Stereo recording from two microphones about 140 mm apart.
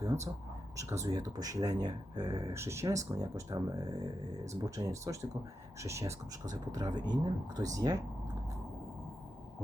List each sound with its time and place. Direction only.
0.8 s speech: 20° right (ahead or behind)